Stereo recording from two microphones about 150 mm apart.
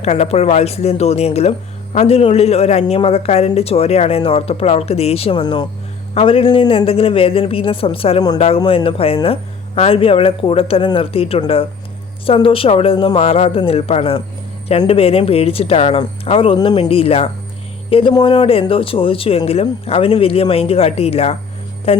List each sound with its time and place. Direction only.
0.0 s speech: 45° left (ahead or behind)